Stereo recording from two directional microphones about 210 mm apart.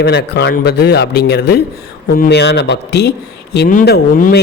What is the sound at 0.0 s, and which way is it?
Speech, 50° left (ahead or behind).